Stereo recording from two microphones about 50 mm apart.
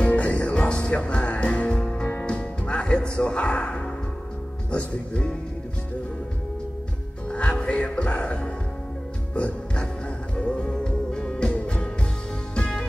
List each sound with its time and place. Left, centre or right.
0.0 s music: left
4.6 s speech: left
7.2 s music: left